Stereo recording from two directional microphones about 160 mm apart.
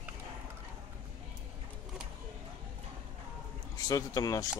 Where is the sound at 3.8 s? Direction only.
20° left (ahead or behind).